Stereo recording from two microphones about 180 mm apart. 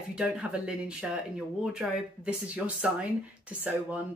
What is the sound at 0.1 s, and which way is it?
Speech, 5° right (ahead or behind).